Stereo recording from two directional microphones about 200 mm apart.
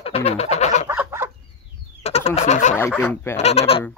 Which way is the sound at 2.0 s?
30° left (ahead or behind).